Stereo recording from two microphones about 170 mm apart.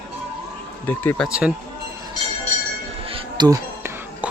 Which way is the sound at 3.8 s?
15° right (ahead or behind).